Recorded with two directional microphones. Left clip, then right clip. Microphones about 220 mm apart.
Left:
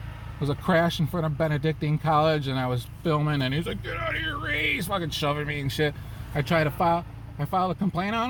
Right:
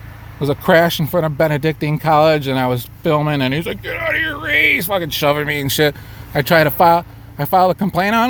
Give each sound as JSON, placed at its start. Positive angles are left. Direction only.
{"t": 0.3, "sound": "speech", "side_deg": -45}